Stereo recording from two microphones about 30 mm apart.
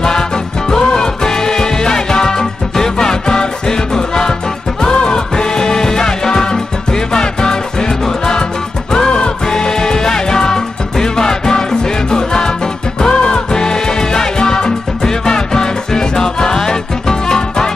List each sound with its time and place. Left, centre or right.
0.7 s music: left
8.9 s music: left